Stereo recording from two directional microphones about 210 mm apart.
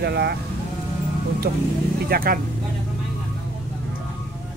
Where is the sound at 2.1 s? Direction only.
45° right (ahead or behind).